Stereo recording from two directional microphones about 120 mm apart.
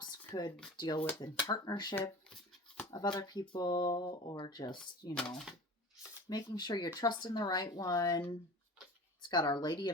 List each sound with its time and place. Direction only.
0.8 s speech: 35° left (ahead or behind)
5.1 s speech: 5° left (ahead or behind)
6.2 s speech: 35° left (ahead or behind)
9.3 s speech: 35° left (ahead or behind)